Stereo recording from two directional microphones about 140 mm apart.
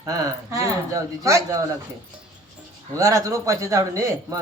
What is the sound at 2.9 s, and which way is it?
A man's voice, 25° right (ahead or behind).